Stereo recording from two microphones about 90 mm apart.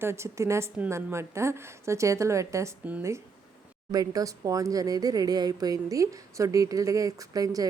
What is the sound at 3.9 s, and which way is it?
Speech, 45° right (ahead or behind).